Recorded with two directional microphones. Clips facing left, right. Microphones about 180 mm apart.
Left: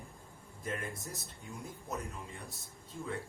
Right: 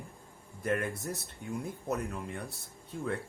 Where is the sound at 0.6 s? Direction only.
65° right (ahead or behind).